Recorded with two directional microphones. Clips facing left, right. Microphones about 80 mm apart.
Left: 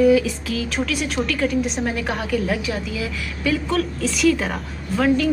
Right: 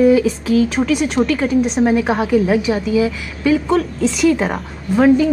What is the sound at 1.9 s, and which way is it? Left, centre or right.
A woman's voice, centre.